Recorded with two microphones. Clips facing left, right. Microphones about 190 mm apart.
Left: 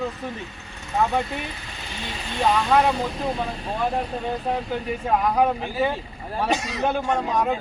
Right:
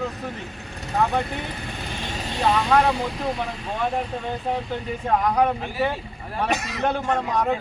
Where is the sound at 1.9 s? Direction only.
50° right (ahead or behind).